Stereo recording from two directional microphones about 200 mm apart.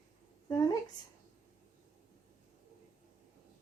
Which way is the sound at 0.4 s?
20° left (ahead or behind).